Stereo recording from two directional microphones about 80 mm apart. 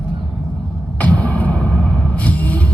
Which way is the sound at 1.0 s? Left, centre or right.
Centre.